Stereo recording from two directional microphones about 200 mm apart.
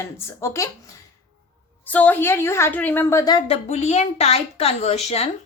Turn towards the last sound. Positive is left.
turn(degrees=30)  # may be behind; listen again after turning